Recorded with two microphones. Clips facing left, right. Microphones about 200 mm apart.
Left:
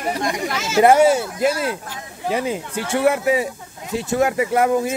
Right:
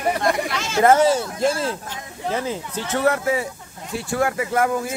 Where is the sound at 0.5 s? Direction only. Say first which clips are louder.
Left 4 dB; 5° left (ahead or behind).